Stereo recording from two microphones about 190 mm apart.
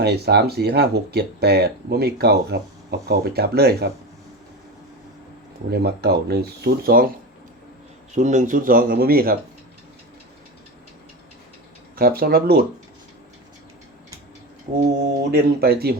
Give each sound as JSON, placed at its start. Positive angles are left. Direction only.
{"t": 0.0, "sound": "speech", "side_deg": -60}
{"t": 5.7, "sound": "speech", "side_deg": -60}
{"t": 8.1, "sound": "speech", "side_deg": -40}
{"t": 11.9, "sound": "speech", "side_deg": -50}
{"t": 15.3, "sound": "speech", "side_deg": -55}